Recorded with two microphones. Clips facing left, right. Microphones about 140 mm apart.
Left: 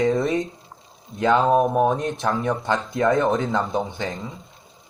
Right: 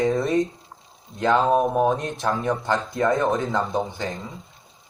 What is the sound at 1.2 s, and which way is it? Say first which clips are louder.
Speech: left 1 dB; 15° left (ahead or behind).